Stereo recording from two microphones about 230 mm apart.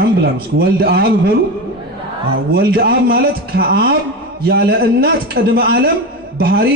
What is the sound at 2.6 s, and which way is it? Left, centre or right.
A man's voice, right.